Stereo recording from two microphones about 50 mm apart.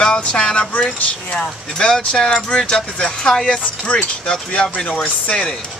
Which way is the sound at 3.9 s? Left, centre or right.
Centre.